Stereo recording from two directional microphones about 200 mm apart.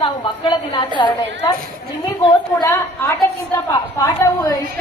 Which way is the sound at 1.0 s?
25° left (ahead or behind).